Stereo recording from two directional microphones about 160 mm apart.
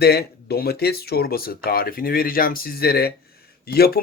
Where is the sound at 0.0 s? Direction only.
85° left.